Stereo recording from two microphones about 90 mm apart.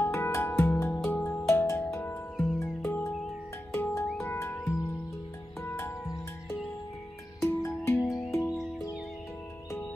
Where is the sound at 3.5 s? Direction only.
25° left (ahead or behind).